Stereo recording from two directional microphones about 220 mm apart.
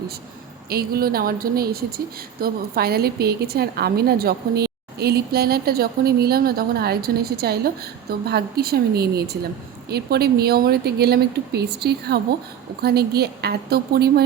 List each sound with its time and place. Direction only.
0.7 s a woman's voice: 45° right (ahead or behind)